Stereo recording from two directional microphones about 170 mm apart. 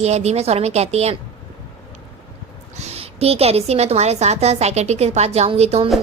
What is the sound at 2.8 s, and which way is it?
A woman's voice, 35° right (ahead or behind).